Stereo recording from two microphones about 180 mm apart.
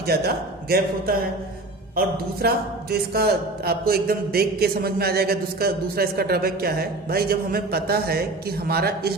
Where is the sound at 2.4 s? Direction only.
60° right (ahead or behind).